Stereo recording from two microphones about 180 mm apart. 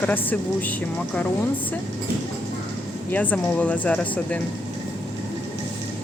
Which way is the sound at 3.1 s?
10° left (ahead or behind).